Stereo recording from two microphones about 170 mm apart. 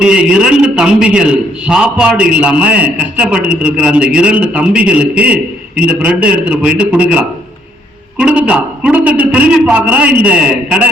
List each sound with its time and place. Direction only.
0.0 s a man's voice: 5° right (ahead or behind)